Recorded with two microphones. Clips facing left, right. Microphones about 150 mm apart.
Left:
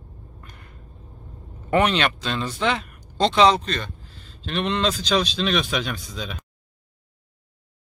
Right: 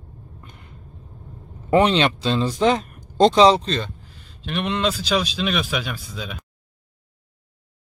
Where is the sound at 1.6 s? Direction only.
25° right (ahead or behind); by 3.4 s 45° right (ahead or behind).